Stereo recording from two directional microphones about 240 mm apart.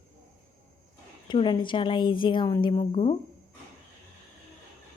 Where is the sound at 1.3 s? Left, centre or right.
Centre.